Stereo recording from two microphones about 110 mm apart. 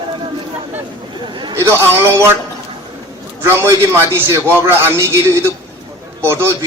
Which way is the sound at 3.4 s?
25° right (ahead or behind).